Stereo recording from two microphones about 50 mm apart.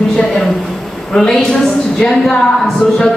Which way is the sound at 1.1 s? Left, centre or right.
Centre.